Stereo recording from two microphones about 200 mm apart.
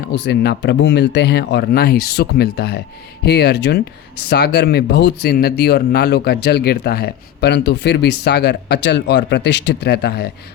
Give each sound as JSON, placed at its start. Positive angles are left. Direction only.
{"t": 0.0, "sound": "a man's voice", "side_deg": 55}